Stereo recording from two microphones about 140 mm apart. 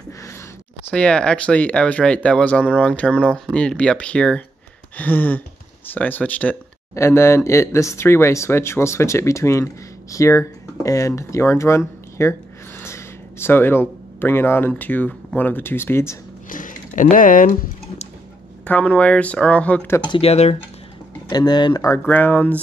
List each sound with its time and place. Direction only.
0.8 s speech: 5° left (ahead or behind)
16.4 s speech: 70° left (ahead or behind)
18.7 s speech: 10° left (ahead or behind)
20.1 s speech: 45° left (ahead or behind)
21.3 s speech: 30° left (ahead or behind); by 22.6 s 10° left (ahead or behind)